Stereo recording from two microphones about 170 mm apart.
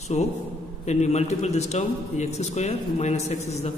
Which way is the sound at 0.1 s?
40° left (ahead or behind).